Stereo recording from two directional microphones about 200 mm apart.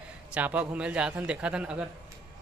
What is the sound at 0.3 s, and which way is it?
A man's voice, 5° right (ahead or behind).